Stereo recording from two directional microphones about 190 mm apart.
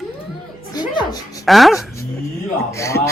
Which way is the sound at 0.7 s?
20° left (ahead or behind).